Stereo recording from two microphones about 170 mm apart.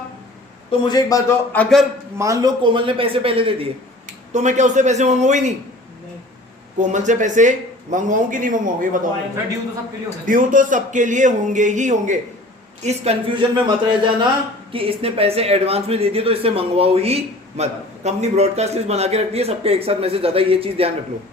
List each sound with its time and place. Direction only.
0.7 s a man's voice: 25° left (ahead or behind)
1.5 s a man's voice: centre (ahead or behind)
2.1 s speech: 20° right (ahead or behind)
4.3 s a man's voice: 45° right (ahead or behind)
6.7 s a man's voice: 45° right (ahead or behind)
10.2 s a man's voice: 50° right (ahead or behind); by 20.9 s 35° right (ahead or behind)